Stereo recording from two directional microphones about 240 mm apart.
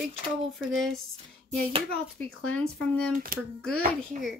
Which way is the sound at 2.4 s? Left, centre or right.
Centre.